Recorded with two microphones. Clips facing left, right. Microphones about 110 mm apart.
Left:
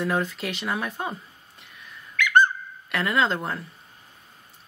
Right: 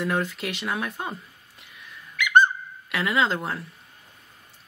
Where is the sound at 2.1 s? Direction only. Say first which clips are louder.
Right 1 dB; 20° right (ahead or behind).